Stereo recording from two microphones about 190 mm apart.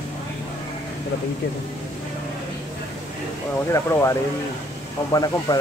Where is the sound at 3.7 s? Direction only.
15° left (ahead or behind).